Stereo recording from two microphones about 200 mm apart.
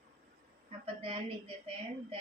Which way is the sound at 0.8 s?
25° right (ahead or behind).